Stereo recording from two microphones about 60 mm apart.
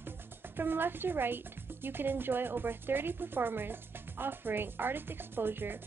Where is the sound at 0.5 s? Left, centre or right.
Right.